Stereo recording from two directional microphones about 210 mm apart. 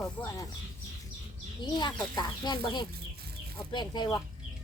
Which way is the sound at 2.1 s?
20° left (ahead or behind).